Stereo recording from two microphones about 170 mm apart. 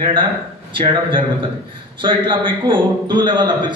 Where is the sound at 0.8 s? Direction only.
30° right (ahead or behind).